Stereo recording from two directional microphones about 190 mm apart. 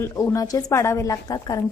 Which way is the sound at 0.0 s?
15° left (ahead or behind).